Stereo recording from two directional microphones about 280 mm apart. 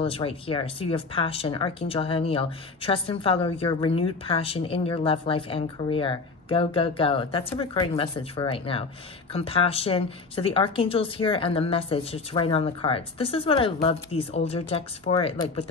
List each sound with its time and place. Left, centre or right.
0.0 s speech: centre